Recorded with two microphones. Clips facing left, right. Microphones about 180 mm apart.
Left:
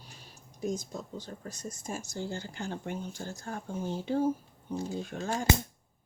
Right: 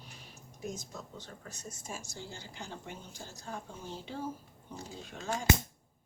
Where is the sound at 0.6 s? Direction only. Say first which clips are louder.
Left 7 dB; 35° left (ahead or behind); by 5.3 s 50° left (ahead or behind).